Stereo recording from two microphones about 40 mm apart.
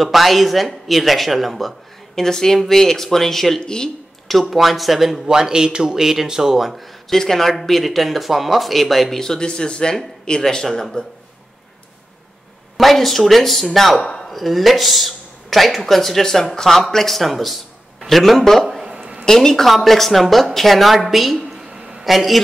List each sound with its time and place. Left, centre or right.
0.0 s speech: centre
2.1 s speech: centre
3.6 s speech: centre
4.3 s speech: centre
5.2 s speech: centre
7.1 s speech: centre
9.2 s speech: centre
12.7 s speech: centre
18.9 s a sound: right
19.2 s speech: centre
21.5 s a sound: centre
22.0 s a man's voice: centre